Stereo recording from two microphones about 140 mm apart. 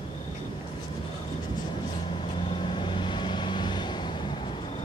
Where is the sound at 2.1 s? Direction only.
40° left (ahead or behind).